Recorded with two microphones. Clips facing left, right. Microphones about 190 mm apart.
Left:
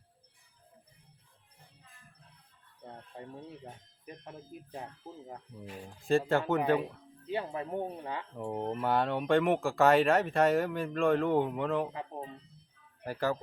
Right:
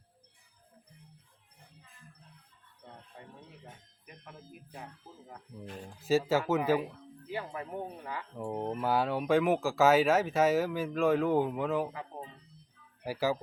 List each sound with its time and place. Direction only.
3.1 s speech: 35° left (ahead or behind)
5.6 s speech: centre (ahead or behind)
7.3 s speech: 25° left (ahead or behind)
8.4 s speech: centre (ahead or behind)
11.9 s speech: 25° left (ahead or behind)
13.1 s speech: 5° right (ahead or behind)